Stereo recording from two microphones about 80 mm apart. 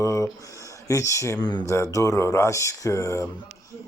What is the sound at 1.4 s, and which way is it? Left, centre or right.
Speech, left.